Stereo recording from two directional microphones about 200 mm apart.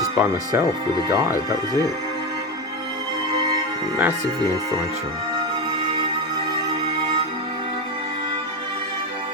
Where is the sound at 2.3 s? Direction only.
20° right (ahead or behind).